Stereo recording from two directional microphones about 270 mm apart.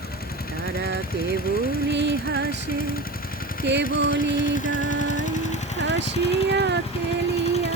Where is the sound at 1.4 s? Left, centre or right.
Left.